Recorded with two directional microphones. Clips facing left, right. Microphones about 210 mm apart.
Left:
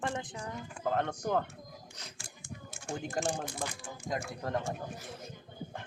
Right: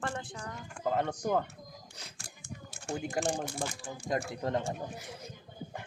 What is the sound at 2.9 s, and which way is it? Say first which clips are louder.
Speech: right 2 dB; 10° right (ahead or behind).